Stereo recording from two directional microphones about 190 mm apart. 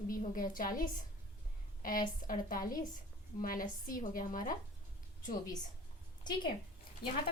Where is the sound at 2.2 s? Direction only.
45° left (ahead or behind).